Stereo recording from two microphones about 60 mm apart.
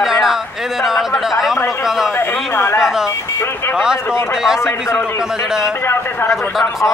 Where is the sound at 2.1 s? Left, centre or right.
Left.